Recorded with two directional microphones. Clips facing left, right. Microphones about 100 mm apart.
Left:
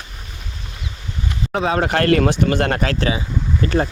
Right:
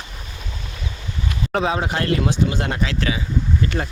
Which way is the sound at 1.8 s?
65° left (ahead or behind).